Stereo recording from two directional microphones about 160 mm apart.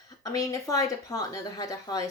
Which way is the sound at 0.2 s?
20° left (ahead or behind).